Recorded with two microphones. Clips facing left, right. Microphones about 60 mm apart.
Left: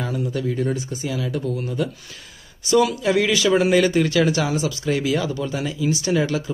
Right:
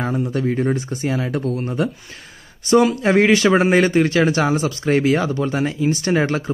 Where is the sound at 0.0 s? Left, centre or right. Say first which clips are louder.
Right 4 dB; right.